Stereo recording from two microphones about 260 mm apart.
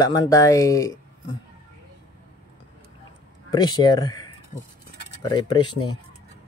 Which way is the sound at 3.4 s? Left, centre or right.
Centre.